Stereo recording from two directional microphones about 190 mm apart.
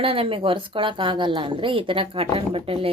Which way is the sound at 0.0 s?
30° right (ahead or behind).